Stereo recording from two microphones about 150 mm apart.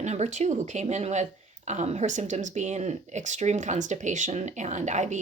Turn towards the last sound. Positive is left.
turn(degrees=-50)  # may be behind; listen again after turning